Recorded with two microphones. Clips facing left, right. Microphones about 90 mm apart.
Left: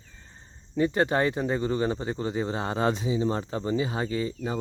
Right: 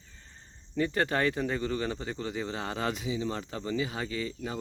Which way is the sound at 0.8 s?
20° left (ahead or behind).